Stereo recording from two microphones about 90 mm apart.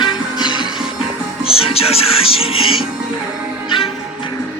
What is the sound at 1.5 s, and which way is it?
Music, 90° left.